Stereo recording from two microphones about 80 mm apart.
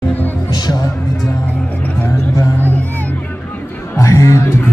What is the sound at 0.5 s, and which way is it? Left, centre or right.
Music, left.